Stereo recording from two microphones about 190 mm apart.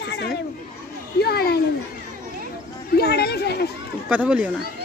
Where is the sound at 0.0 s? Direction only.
60° left (ahead or behind).